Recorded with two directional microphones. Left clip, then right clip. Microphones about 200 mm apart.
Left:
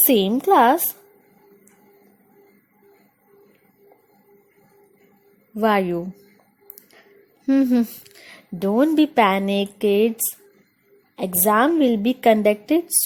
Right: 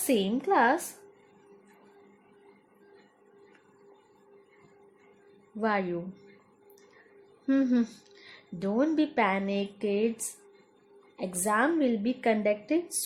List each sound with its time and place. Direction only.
0.1 s a woman's voice: 45° left (ahead or behind)
5.5 s a woman's voice: 40° left (ahead or behind)
7.4 s a woman's voice: 30° left (ahead or behind)